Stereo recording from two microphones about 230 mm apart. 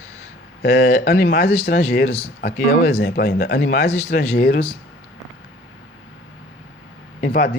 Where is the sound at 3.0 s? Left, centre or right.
Left.